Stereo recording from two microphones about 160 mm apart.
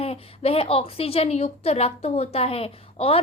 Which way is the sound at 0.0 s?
40° left (ahead or behind).